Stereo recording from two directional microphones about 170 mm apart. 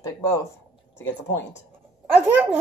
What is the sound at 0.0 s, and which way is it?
Speech, 20° left (ahead or behind).